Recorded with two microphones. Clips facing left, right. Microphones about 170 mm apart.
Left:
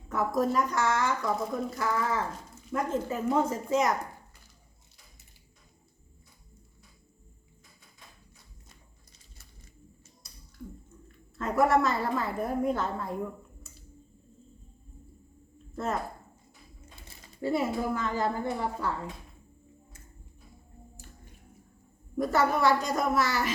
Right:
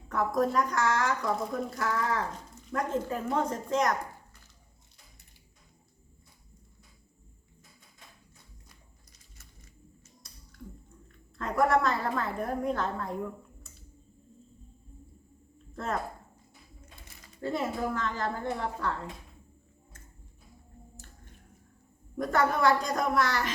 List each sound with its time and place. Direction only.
0.1 s speech: 5° left (ahead or behind)
11.3 s speech: 5° left (ahead or behind)
15.7 s speech: 5° left (ahead or behind)
17.1 s a sound: 30° left (ahead or behind)
17.4 s a woman's voice: 10° left (ahead or behind)
22.2 s speech: 5° left (ahead or behind)